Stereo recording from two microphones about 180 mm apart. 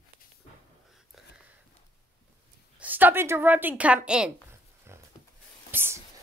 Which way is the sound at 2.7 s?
10° right (ahead or behind).